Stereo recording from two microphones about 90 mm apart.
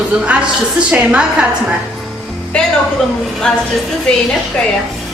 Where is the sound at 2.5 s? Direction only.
15° left (ahead or behind).